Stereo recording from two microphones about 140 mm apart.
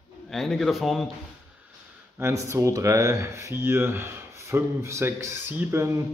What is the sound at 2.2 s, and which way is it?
Speech, 20° right (ahead or behind).